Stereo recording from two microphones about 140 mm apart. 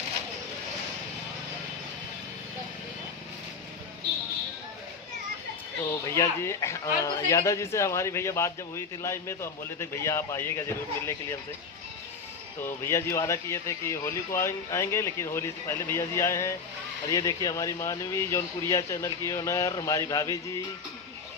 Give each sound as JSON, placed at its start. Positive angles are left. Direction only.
{"t": 5.9, "sound": "speech", "side_deg": 20}
{"t": 12.6, "sound": "speech", "side_deg": 15}